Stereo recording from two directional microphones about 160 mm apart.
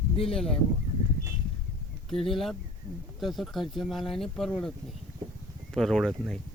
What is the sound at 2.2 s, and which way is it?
Speech, centre (ahead or behind).